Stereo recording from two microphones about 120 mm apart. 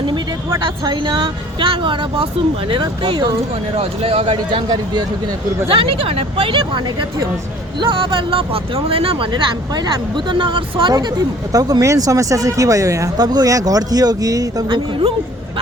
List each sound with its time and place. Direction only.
0.9 s speech: 40° right (ahead or behind)
3.8 s speech: 55° right (ahead or behind)
11.5 s speech: 30° right (ahead or behind)